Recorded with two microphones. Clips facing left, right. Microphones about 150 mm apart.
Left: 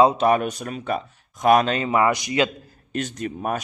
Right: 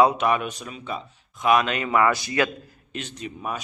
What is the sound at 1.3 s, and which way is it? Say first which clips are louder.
Speech: left 3 dB; 40° left (ahead or behind).